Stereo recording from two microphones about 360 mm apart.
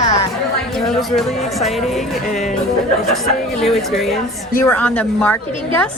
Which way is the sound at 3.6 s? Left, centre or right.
Centre.